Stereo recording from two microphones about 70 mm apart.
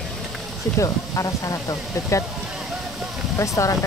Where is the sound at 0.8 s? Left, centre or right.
Left.